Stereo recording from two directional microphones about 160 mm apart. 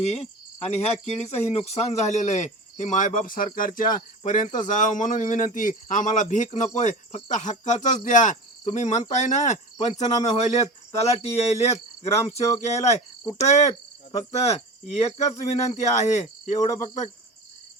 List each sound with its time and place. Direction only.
0.0 s cricket: 40° left (ahead or behind)
0.7 s speech: 40° left (ahead or behind)